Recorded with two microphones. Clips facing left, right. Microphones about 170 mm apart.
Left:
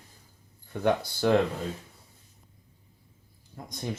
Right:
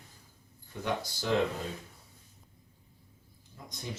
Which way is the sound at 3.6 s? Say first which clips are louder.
Left 6 dB; 55° left (ahead or behind).